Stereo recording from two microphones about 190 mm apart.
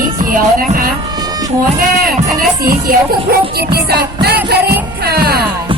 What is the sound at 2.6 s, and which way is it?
Speech, 50° right (ahead or behind).